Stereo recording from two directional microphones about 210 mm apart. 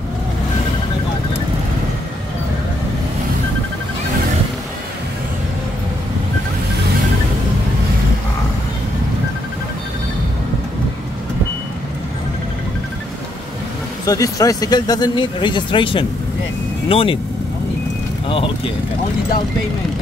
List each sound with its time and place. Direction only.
14.0 s speech: 15° left (ahead or behind)